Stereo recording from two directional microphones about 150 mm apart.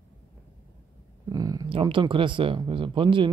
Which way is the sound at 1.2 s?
25° right (ahead or behind).